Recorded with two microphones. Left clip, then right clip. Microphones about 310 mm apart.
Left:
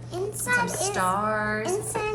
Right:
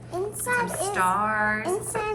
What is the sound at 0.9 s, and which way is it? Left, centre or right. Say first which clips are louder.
Music: right 3 dB; centre.